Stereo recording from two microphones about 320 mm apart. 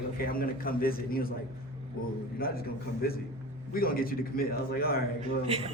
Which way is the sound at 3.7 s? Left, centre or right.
Left.